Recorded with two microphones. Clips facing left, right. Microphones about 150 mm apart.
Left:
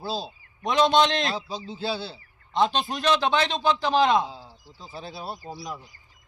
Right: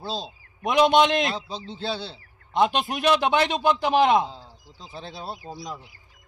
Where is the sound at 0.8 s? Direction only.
15° right (ahead or behind).